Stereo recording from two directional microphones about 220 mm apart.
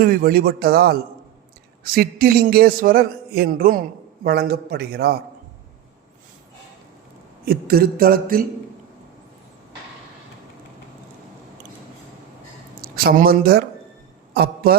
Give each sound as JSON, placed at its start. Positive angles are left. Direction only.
{"t": 0.0, "sound": "a man's voice", "side_deg": -40}
{"t": 7.4, "sound": "a man's voice", "side_deg": -45}
{"t": 12.8, "sound": "a man's voice", "side_deg": -40}